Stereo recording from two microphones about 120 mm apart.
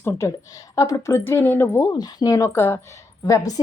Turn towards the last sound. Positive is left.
turn(degrees=30)  # may be behind; listen again after turning